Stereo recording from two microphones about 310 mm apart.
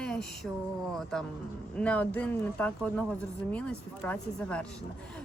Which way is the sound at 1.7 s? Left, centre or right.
Centre.